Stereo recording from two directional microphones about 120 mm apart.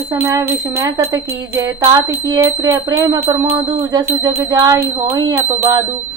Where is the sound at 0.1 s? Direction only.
25° right (ahead or behind).